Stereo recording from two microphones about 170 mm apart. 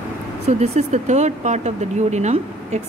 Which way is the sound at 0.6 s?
40° right (ahead or behind).